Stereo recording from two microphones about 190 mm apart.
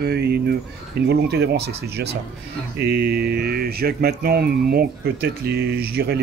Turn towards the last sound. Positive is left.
turn(degrees=-55)  # may be behind; listen again after turning